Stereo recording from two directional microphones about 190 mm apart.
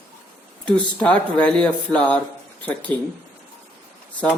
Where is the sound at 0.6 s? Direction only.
5° left (ahead or behind).